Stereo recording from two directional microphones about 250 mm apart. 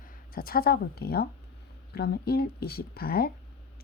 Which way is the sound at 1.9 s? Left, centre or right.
Left.